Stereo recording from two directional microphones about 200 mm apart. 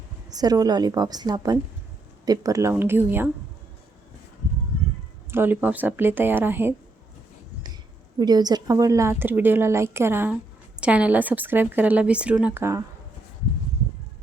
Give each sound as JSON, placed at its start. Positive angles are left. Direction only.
{"t": 0.3, "sound": "a woman's voice", "side_deg": -20}
{"t": 5.3, "sound": "a woman's voice", "side_deg": -10}
{"t": 8.2, "sound": "a woman's voice", "side_deg": -20}